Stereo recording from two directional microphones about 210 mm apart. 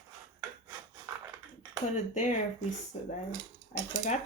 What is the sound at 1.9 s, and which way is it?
Speech, 35° left (ahead or behind).